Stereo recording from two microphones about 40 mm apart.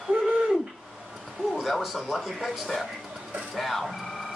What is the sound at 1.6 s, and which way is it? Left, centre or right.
Speech, centre.